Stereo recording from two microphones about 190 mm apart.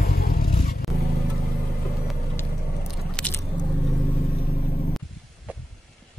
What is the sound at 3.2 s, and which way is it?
Biting, 5° left (ahead or behind).